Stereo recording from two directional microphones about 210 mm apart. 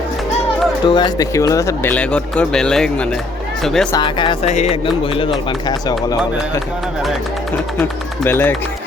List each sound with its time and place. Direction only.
0.9 s speech: 20° left (ahead or behind); by 3.8 s centre (ahead or behind)
3.9 s music: 20° left (ahead or behind)
7.8 s speech: 10° left (ahead or behind)